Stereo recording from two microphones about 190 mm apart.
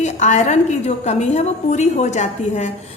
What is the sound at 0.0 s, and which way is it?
A woman's voice, 40° left (ahead or behind).